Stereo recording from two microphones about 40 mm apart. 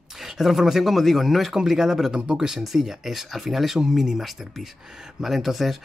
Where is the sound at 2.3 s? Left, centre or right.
Centre.